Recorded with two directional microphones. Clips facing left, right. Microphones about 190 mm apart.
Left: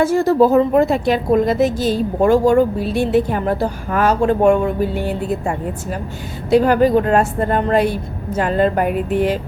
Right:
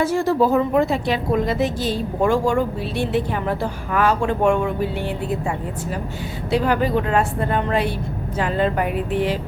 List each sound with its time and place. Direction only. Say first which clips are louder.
0.0 s a woman's voice: left 5 dB; 45° left (ahead or behind)